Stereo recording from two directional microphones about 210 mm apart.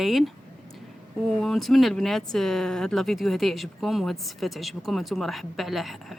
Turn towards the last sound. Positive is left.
turn(degrees=0)  # may be behind; listen again after turning